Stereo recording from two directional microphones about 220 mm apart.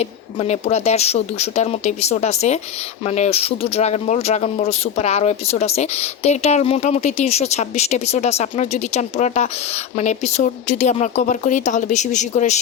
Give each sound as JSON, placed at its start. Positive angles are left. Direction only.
{"t": 0.0, "sound": "speech", "side_deg": 30}